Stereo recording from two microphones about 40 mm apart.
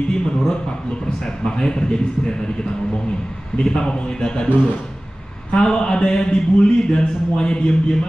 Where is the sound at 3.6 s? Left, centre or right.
Centre.